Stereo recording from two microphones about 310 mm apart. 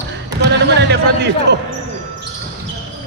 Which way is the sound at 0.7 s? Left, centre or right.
Right.